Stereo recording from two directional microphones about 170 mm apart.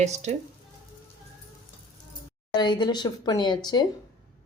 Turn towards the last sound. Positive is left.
turn(degrees=25)  # may be behind; listen again after turning